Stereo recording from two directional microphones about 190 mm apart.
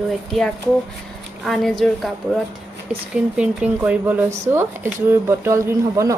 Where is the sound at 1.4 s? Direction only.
Centre (ahead or behind).